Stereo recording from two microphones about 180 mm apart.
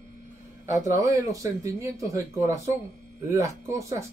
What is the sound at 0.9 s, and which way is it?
Speech, 20° right (ahead or behind).